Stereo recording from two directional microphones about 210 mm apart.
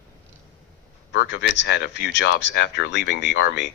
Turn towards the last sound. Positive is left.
turn(degrees=60)  # may be behind; listen again after turning